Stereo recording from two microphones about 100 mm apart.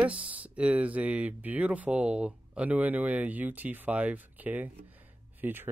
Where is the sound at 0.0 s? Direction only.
15° right (ahead or behind).